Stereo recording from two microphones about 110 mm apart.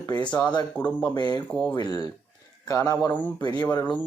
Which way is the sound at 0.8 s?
15° left (ahead or behind).